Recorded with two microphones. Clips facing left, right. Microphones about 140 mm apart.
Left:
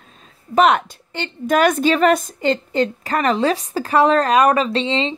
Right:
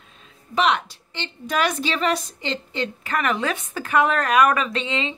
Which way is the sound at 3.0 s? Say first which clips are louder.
Left 3 dB; 35° left (ahead or behind).